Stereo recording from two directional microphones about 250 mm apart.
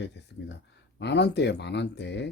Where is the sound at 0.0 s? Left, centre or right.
Left.